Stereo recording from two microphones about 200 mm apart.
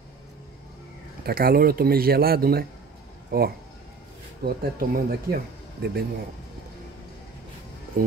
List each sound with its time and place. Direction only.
1.2 s speech: 50° right (ahead or behind)